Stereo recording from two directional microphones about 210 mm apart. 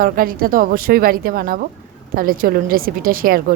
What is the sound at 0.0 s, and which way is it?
A woman's voice, 45° right (ahead or behind).